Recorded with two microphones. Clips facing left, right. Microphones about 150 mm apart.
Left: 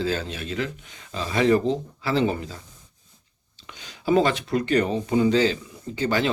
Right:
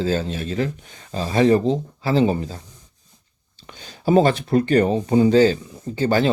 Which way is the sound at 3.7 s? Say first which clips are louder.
Right 3 dB; 40° right (ahead or behind).